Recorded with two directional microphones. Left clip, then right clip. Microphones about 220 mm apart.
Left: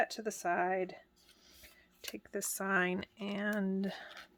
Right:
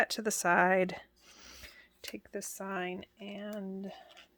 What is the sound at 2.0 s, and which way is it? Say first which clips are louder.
Speech: right 1 dB; 20° right (ahead or behind).